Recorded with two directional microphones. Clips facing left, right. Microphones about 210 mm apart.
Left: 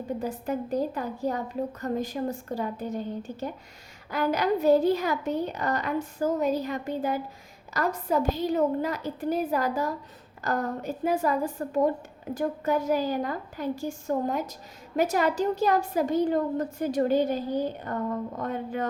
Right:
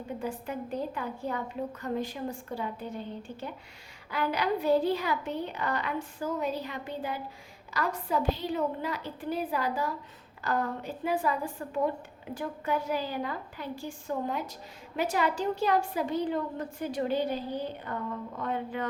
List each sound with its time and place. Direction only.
0.2 s a woman's voice: 40° left (ahead or behind)